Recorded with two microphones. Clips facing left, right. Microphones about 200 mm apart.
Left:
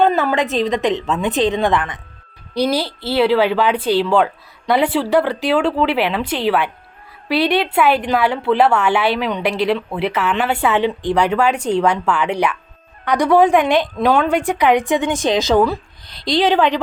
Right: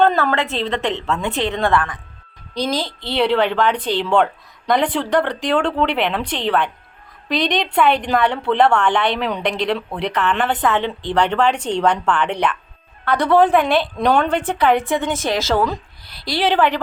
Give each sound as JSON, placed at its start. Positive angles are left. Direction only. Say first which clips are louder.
{"t": 0.0, "sound": "a woman's voice", "louder": "left 1 dB", "side_deg": 10}
{"t": 14.0, "sound": "a woman's voice", "louder": "left 1 dB", "side_deg": 5}